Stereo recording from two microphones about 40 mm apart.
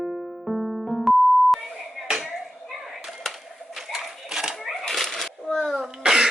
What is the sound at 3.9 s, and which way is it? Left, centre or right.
Typewriter, centre.